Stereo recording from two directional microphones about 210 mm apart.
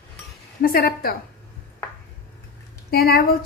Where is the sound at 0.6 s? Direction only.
45° left (ahead or behind).